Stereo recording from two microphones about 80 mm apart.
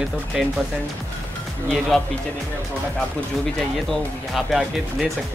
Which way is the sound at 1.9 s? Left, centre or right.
Centre.